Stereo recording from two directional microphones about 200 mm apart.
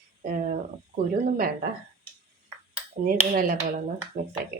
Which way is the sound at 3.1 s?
45° right (ahead or behind).